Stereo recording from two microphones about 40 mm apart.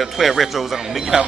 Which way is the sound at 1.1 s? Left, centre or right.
Right.